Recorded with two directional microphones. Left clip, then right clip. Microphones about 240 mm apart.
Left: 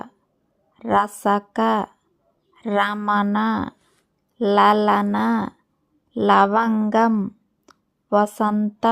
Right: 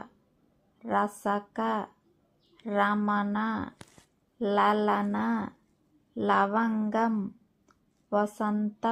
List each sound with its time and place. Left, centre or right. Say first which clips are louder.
0.8 s speech: left 9 dB; left